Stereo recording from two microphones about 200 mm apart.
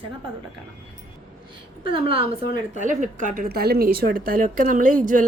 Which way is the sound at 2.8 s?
40° right (ahead or behind).